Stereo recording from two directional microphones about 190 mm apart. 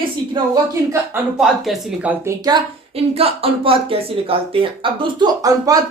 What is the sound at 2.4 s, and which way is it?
Speech, 25° right (ahead or behind).